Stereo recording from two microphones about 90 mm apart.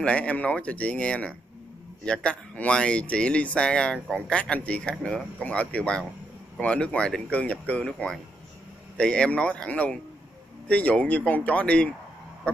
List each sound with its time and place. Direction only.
0.0 s speech: 15° left (ahead or behind)